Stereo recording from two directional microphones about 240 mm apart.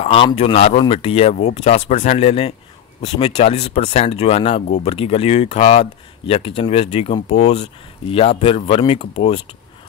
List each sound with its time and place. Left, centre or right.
0.0 s speech: left
4.6 s speech: left
4.9 s speech: left